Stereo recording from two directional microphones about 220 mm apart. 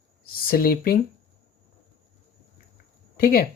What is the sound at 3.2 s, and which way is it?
Speech, 40° left (ahead or behind).